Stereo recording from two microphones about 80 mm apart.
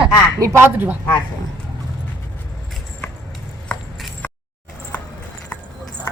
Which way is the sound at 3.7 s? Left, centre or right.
Centre.